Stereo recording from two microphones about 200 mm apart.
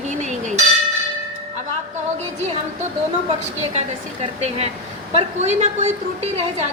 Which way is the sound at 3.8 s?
35° right (ahead or behind).